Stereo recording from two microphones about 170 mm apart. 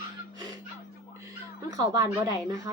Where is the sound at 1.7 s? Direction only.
20° right (ahead or behind).